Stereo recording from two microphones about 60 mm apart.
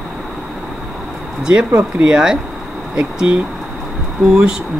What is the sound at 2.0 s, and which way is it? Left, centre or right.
Speech, centre.